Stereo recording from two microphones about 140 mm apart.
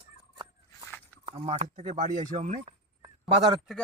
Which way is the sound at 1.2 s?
45° right (ahead or behind).